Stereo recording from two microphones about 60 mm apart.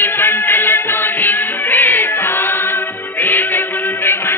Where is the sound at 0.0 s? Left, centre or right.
Left.